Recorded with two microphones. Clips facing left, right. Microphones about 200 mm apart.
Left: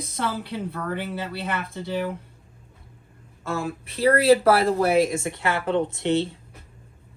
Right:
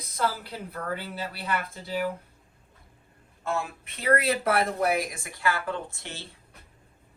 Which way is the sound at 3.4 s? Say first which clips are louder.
Left 3 dB; 35° left (ahead or behind).